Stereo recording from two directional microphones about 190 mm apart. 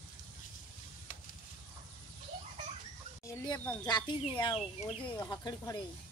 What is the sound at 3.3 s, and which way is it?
Speech, 20° left (ahead or behind).